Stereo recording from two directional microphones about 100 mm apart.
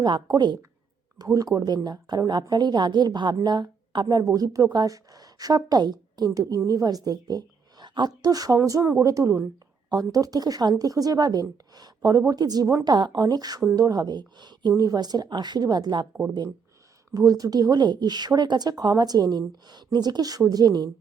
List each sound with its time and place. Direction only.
0.0 s a woman's voice: 45° right (ahead or behind)
17.1 s a woman's voice: 40° right (ahead or behind)